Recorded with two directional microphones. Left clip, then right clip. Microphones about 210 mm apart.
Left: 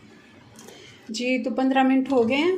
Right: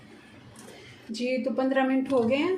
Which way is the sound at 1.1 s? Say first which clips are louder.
Left 3 dB; 40° left (ahead or behind).